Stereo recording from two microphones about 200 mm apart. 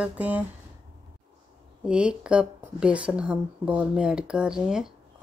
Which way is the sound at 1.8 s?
5° right (ahead or behind).